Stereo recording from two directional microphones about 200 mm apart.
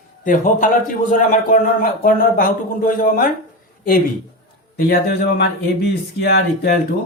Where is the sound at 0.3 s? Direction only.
40° left (ahead or behind).